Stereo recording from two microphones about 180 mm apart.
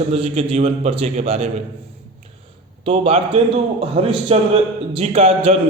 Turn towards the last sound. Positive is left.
turn(degrees=-35)  # may be behind; listen again after turning